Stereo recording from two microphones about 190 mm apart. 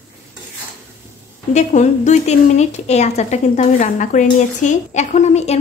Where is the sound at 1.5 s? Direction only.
40° left (ahead or behind).